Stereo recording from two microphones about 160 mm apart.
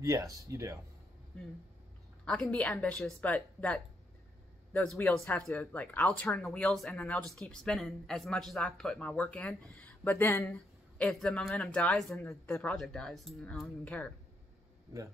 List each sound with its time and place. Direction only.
0.0 s speech: 20° right (ahead or behind)
2.5 s a woman's voice: 5° left (ahead or behind)
12.2 s a woman's voice: 15° left (ahead or behind)
12.7 s speech: centre (ahead or behind)